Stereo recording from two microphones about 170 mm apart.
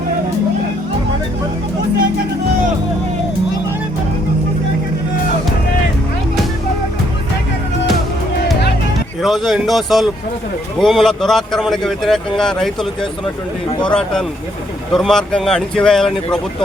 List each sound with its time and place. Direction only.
9.2 s speech: centre (ahead or behind)